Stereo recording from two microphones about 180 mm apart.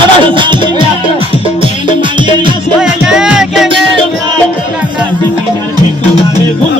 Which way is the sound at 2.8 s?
5° right (ahead or behind).